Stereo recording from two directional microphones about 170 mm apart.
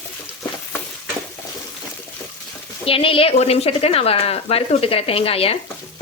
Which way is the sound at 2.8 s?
35° left (ahead or behind).